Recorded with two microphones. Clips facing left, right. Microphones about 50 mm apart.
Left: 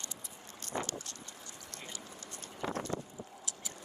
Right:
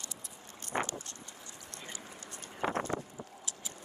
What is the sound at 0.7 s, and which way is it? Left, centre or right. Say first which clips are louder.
Vehicle: right 3 dB; right.